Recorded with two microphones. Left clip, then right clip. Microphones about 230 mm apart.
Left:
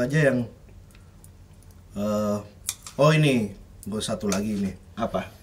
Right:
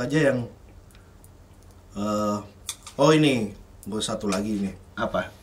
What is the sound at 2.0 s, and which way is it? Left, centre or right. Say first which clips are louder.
Speech: even; left.